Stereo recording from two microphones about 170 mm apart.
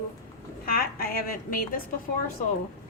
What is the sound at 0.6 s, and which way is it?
A woman's voice, 60° left (ahead or behind).